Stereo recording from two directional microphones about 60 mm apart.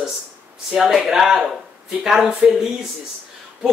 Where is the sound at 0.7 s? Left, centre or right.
Centre.